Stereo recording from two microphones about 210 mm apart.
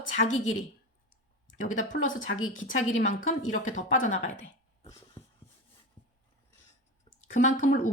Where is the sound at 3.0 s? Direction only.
35° left (ahead or behind).